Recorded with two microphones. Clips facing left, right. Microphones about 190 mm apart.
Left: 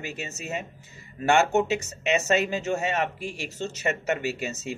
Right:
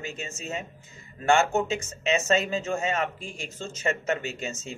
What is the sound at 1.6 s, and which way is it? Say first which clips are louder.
Speech: left 1 dB; 70° left (ahead or behind).